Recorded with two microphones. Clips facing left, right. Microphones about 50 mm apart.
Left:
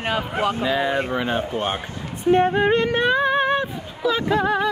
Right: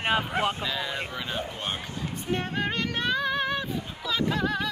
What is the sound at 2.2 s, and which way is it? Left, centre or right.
Female singing, left.